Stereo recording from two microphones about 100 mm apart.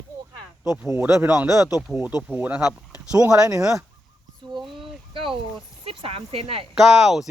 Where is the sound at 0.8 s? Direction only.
25° right (ahead or behind).